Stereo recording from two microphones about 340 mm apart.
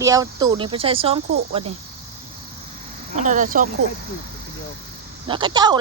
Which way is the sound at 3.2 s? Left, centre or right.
Right.